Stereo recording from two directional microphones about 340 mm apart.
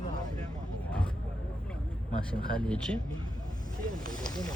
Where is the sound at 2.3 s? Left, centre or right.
Centre.